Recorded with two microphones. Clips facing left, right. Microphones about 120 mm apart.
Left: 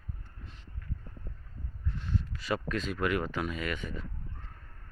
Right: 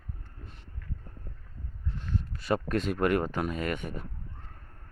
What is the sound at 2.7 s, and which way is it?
Speech, 55° right (ahead or behind).